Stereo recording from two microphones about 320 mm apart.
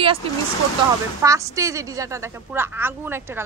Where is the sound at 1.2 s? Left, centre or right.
Centre.